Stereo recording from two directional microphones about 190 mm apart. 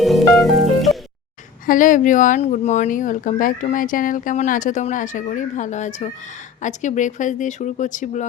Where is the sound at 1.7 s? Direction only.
45° left (ahead or behind).